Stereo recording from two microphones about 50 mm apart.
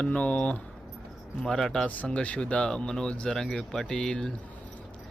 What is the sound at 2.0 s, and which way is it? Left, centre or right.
Speech, left.